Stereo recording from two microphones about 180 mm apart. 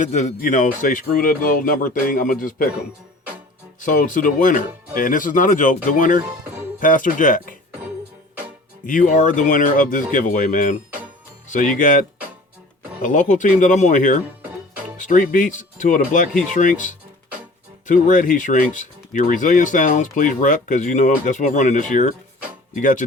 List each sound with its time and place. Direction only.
0.0 s speech: 40° left (ahead or behind)
3.8 s speech: 45° left (ahead or behind)
8.9 s speech: 45° left (ahead or behind)